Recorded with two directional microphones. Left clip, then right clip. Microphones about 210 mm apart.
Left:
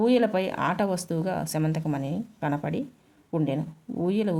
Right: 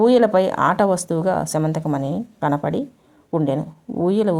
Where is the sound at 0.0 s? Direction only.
15° right (ahead or behind).